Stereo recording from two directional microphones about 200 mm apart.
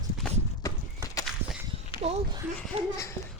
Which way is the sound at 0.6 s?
15° left (ahead or behind).